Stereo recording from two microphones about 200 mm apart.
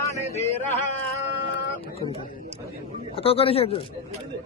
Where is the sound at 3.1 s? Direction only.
30° left (ahead or behind).